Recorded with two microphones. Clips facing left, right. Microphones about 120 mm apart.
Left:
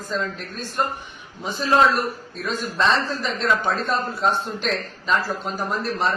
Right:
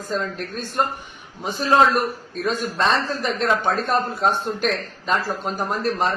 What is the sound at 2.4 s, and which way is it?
A man's voice, 45° right (ahead or behind).